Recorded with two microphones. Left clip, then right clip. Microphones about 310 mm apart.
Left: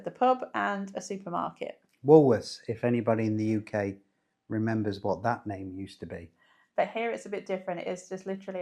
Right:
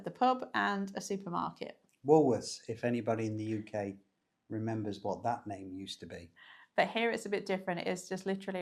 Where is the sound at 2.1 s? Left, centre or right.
Left.